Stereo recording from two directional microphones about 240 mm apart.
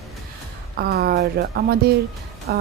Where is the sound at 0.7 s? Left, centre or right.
Right.